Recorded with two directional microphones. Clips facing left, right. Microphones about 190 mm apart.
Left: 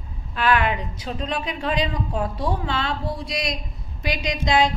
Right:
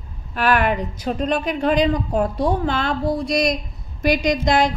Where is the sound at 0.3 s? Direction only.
50° right (ahead or behind).